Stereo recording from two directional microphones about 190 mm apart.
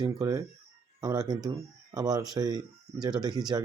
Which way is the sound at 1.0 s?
20° right (ahead or behind).